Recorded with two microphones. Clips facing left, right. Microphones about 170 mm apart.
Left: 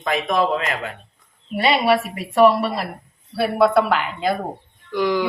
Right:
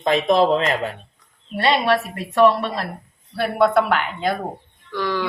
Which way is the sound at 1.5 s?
10° left (ahead or behind).